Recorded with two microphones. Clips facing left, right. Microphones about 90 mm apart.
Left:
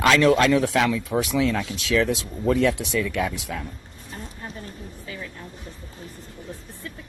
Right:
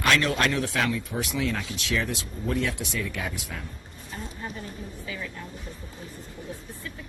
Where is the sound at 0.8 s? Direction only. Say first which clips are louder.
Left 6 dB; 90° left.